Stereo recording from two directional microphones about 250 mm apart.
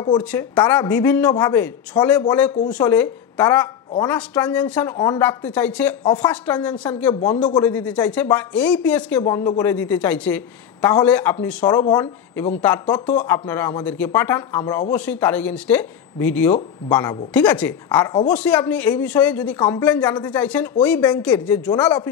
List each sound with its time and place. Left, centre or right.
0.2 s a man's voice: centre
12.8 s a man's voice: centre
17.8 s a man's voice: centre
18.3 s a man's voice: centre